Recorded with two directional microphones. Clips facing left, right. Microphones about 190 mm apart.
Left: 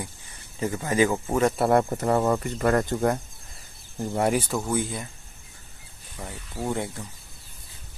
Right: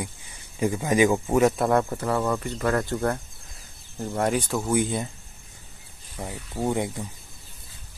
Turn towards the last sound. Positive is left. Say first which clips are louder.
# right 3 dB
turn(degrees=-20)  # may be behind; listen again after turning